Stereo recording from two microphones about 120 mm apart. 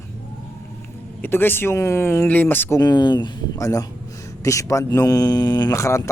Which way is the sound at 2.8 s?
35° left (ahead or behind).